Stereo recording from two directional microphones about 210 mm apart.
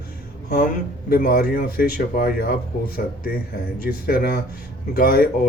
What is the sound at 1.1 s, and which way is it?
Speech, 45° left (ahead or behind).